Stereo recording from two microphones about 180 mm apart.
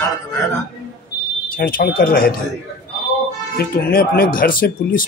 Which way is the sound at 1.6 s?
55° left (ahead or behind).